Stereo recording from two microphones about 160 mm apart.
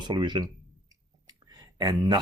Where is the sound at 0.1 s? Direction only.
25° right (ahead or behind).